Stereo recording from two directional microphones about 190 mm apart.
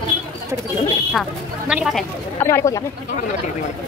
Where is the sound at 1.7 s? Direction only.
Centre (ahead or behind).